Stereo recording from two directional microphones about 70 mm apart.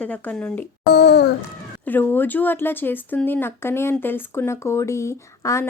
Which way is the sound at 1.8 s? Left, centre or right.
Left.